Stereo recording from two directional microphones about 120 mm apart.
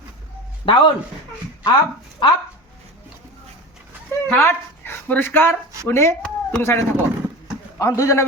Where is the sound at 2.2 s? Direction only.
40° left (ahead or behind).